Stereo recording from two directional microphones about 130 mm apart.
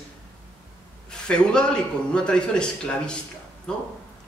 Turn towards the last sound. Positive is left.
turn(degrees=5)  # may be behind; listen again after turning